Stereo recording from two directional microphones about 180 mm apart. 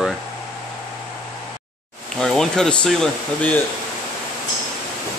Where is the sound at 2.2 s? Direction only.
5° left (ahead or behind).